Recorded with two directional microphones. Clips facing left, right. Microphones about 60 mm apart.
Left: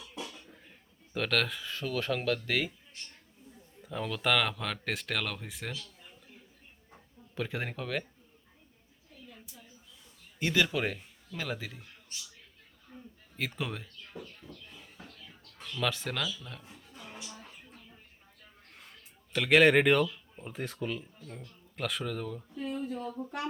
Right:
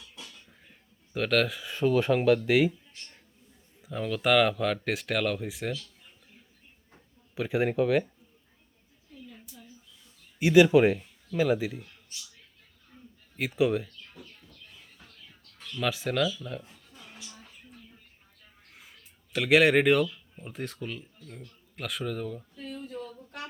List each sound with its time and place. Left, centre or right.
1.1 s speech: centre
1.7 s speech: centre
3.8 s speech: centre
7.3 s speech: centre
10.4 s speech: centre
13.3 s speech: centre
15.8 s speech: centre
16.6 s a sound: left
18.7 s a sound: centre
20.4 s speech: centre
22.7 s speech: left